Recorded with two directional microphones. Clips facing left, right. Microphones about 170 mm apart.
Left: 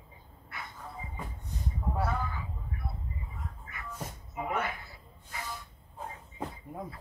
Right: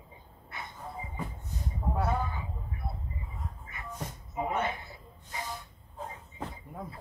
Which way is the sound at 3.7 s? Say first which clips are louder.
Right 1 dB; 25° right (ahead or behind).